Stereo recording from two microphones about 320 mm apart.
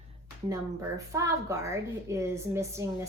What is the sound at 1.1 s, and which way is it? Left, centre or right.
Speech, centre.